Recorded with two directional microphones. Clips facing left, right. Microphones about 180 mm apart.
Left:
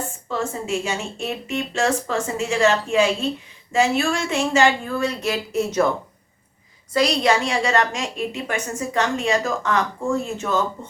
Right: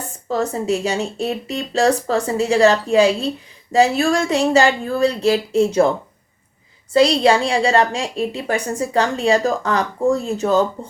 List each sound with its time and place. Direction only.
0.3 s a woman's voice: 40° right (ahead or behind)
6.9 s a woman's voice: 30° right (ahead or behind)